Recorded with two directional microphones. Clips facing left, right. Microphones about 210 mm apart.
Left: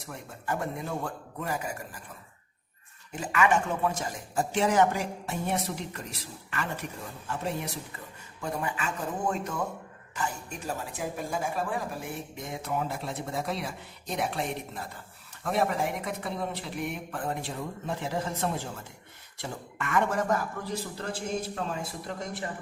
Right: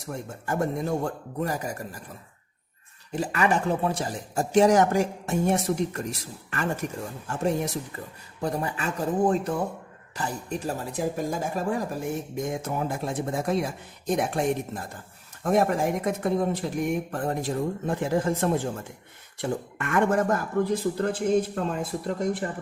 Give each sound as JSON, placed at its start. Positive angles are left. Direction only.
{"t": 0.0, "sound": "speech", "side_deg": -45}
{"t": 3.2, "sound": "speech", "side_deg": -35}